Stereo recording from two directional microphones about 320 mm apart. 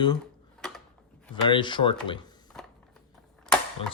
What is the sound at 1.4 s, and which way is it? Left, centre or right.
Speech, centre.